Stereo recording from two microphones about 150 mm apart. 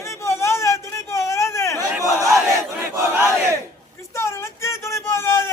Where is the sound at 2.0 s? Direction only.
20° right (ahead or behind).